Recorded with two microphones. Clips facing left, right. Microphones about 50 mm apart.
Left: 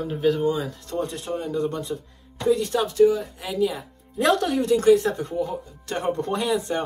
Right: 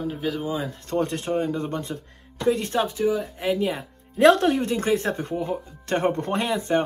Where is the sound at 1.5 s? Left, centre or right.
Right.